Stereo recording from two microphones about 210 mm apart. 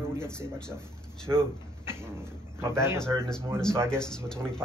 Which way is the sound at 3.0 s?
5° left (ahead or behind).